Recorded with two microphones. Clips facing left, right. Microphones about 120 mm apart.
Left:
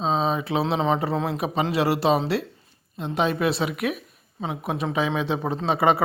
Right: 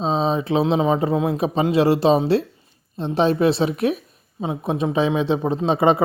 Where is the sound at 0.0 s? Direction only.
30° right (ahead or behind).